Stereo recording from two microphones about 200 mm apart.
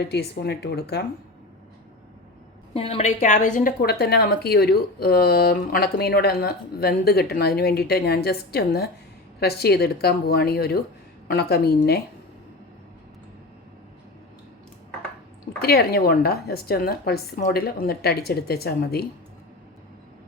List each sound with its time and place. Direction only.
0.0 s speech: 55° left (ahead or behind)
2.7 s a woman's voice: 30° left (ahead or behind); by 12.0 s 50° left (ahead or behind)
15.6 s a woman's voice: 50° left (ahead or behind)